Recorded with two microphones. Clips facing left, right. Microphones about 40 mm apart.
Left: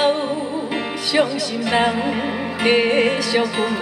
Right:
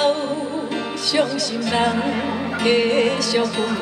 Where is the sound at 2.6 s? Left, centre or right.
Left.